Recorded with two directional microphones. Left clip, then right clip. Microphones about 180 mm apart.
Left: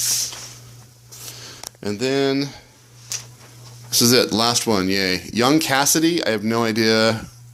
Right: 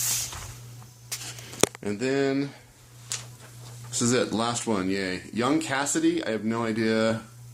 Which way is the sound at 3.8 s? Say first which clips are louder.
Left 9 dB; 35° left (ahead or behind).